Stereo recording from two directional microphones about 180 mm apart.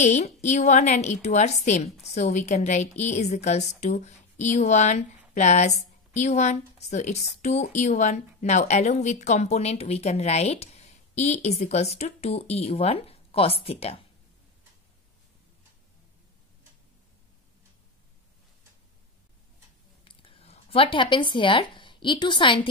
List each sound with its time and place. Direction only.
0.0 s a woman's voice: 40° left (ahead or behind)
20.1 s speech: 30° left (ahead or behind)